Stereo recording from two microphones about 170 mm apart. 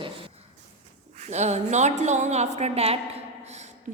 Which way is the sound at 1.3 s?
40° right (ahead or behind).